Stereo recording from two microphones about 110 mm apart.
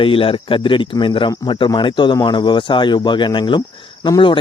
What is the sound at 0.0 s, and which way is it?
Speech, 55° left (ahead or behind).